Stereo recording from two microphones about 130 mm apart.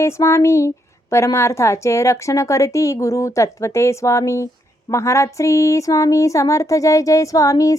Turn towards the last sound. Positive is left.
turn(degrees=25)  # may be behind; listen again after turning